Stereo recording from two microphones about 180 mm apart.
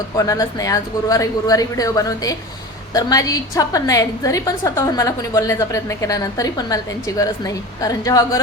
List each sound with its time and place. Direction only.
0.2 s a woman's voice: 20° left (ahead or behind)